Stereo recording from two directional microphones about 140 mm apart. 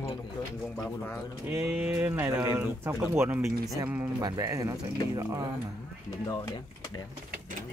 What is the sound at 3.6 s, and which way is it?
Speech, 25° right (ahead or behind).